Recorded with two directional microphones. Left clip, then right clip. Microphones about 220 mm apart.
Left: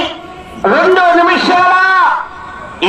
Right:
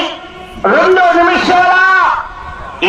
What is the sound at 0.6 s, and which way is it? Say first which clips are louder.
A man's voice: even; 25° left (ahead or behind).